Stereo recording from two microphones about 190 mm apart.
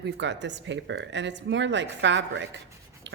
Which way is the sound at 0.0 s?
70° right (ahead or behind).